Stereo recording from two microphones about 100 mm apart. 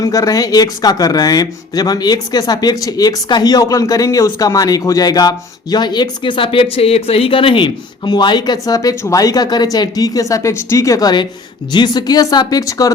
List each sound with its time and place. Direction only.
0.0 s speech: 35° left (ahead or behind)